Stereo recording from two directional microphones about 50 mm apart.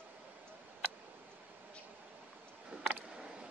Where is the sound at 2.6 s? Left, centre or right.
Centre.